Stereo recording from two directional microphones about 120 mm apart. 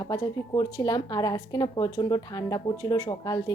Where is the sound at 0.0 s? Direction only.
35° left (ahead or behind).